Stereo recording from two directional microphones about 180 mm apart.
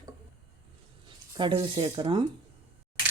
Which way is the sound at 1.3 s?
25° right (ahead or behind).